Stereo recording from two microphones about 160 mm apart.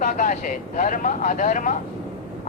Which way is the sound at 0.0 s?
55° left (ahead or behind).